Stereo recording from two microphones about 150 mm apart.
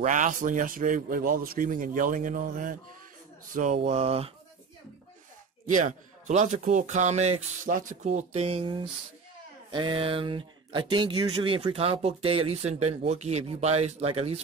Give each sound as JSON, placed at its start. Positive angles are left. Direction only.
{"t": 0.0, "sound": "speech", "side_deg": -55}
{"t": 3.5, "sound": "speech", "side_deg": -50}
{"t": 5.7, "sound": "speech", "side_deg": -60}